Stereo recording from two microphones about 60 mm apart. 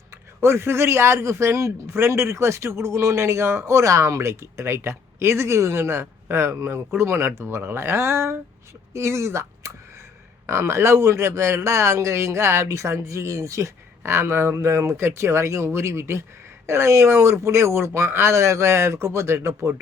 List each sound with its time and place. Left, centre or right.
0.4 s a man's voice: right